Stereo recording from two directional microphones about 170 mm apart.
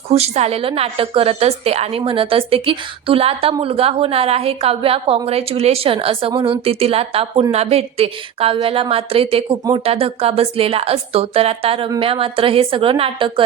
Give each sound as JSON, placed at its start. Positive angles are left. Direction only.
{"t": 0.1, "sound": "a woman's voice", "side_deg": -40}